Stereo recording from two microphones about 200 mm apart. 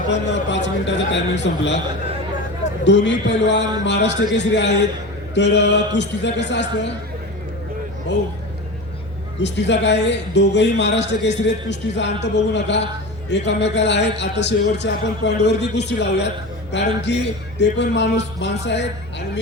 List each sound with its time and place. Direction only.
0.1 s a man's voice: 60° left (ahead or behind)
2.8 s a man's voice: 60° left (ahead or behind)
9.4 s a man's voice: 60° left (ahead or behind)